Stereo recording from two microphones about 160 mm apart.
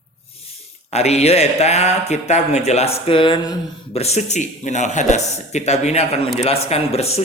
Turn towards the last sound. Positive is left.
turn(degrees=40)  # may be behind; listen again after turning